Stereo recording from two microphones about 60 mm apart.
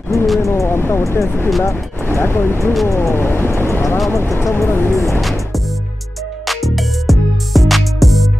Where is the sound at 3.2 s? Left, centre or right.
Left.